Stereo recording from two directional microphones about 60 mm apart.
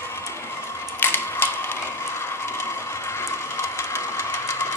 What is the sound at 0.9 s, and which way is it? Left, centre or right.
Mechanisms, left.